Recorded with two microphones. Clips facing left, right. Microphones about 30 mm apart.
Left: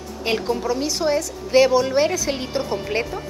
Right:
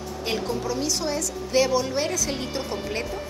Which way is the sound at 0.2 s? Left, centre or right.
Left.